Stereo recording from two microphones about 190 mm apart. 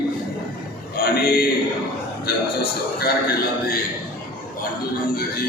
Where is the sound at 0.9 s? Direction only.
55° left (ahead or behind).